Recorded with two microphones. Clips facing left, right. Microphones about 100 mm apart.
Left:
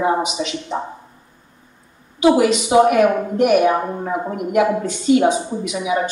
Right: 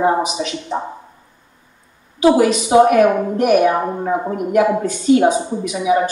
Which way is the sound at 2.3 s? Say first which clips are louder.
Right 2 dB; 35° right (ahead or behind).